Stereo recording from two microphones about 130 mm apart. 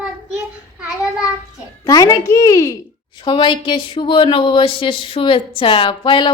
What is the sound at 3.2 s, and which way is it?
Speech, 40° left (ahead or behind).